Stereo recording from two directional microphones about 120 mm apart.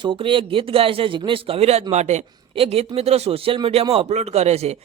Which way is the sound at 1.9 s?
70° right (ahead or behind).